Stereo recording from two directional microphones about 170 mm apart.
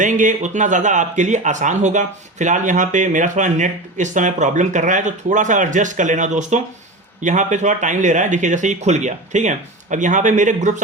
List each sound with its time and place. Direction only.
0.0 s speech: 50° right (ahead or behind)